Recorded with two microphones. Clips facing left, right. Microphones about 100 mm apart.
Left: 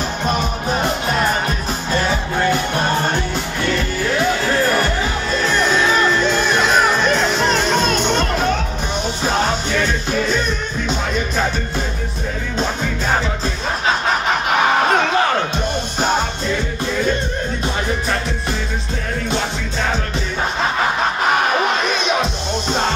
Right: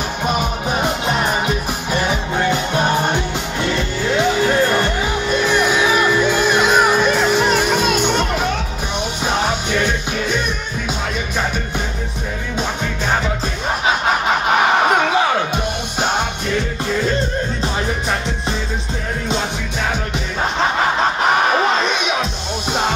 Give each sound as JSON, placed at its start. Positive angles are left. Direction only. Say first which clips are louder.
{"t": 1.9, "sound": "music", "louder": "left 1 dB", "side_deg": -15}
{"t": 15.1, "sound": "music", "louder": "even", "side_deg": -10}
{"t": 22.0, "sound": "music", "louder": "left 2 dB", "side_deg": -5}